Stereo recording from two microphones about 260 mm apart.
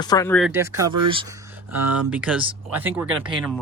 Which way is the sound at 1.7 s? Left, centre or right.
Right.